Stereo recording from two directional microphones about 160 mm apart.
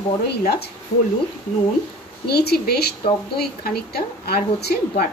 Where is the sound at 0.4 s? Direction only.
75° left (ahead or behind).